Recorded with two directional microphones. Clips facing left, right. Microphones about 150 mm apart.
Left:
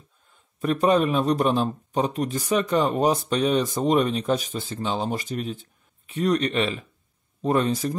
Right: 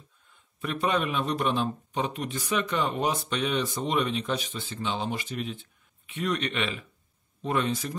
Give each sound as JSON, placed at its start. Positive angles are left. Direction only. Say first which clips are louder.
{"t": 0.6, "sound": "a man's voice", "louder": "left 7 dB", "side_deg": 40}